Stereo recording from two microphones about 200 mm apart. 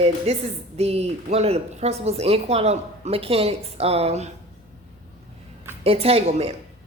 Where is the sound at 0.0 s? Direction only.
30° right (ahead or behind).